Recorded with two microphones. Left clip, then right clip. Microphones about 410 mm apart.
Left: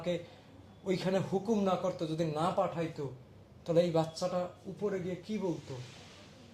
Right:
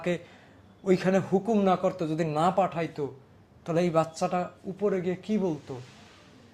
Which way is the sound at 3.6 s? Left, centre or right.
Right.